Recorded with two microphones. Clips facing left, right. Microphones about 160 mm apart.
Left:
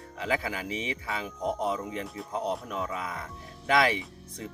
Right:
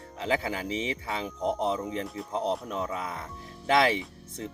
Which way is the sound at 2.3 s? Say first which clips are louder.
Right 2 dB; 25° right (ahead or behind).